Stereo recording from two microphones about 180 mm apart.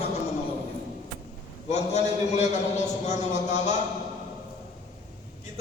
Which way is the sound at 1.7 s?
40° left (ahead or behind).